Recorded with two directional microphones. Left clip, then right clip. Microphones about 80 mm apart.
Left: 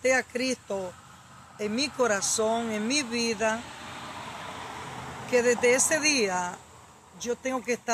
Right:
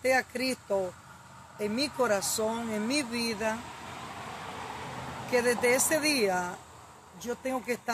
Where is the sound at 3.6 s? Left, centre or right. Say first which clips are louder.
Left 2 dB; centre.